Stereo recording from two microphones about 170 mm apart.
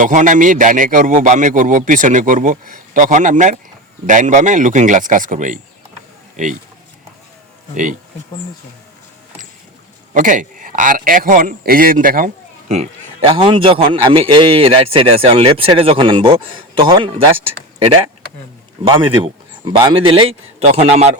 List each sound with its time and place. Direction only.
0.0 s a man's voice: 50° right (ahead or behind)
10.2 s a man's voice: 50° right (ahead or behind)